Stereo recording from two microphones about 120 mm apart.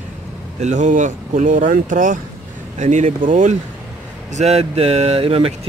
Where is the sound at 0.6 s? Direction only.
90° right.